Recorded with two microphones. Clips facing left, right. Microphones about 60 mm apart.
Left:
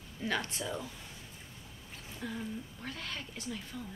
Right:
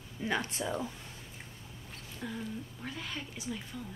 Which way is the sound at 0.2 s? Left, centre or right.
Centre.